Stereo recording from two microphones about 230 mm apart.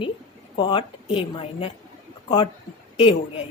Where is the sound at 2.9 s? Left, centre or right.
Left.